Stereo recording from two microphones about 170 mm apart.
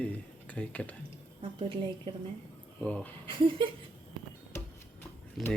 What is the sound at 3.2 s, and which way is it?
Speech, 30° right (ahead or behind).